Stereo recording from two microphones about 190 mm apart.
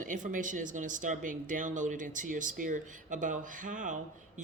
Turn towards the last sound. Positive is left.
turn(degrees=-45)  # may be behind; listen again after turning